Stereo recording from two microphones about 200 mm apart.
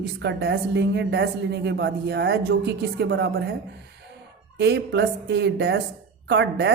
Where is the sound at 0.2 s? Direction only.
60° right (ahead or behind).